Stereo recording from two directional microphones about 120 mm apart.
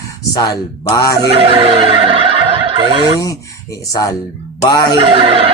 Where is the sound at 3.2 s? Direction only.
30° left (ahead or behind).